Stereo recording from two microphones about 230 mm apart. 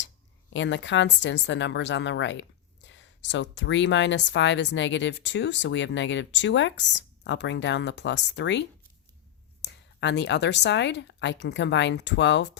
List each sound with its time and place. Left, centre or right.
0.5 s a woman's voice: left